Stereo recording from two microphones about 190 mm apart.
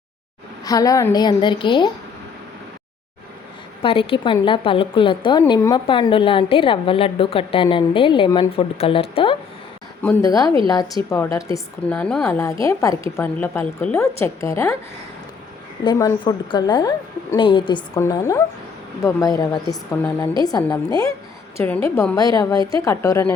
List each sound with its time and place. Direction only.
0.6 s a woman's voice: 20° left (ahead or behind)
3.8 s a woman's voice: 30° left (ahead or behind)
10.0 s a woman's voice: 15° left (ahead or behind)
12.6 s a woman's voice: 15° left (ahead or behind)
15.8 s a woman's voice: 20° left (ahead or behind)